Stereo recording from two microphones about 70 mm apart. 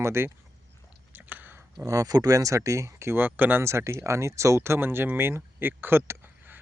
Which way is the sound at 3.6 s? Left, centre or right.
Right.